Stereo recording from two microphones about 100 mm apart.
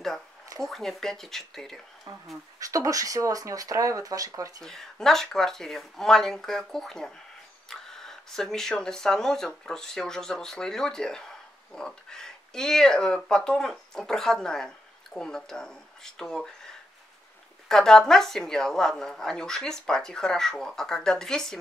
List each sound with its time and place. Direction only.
0.6 s speech: 5° left (ahead or behind)
2.1 s speech: 45° right (ahead or behind)
4.6 s speech: 5° left (ahead or behind)
17.6 s speech: 5° left (ahead or behind)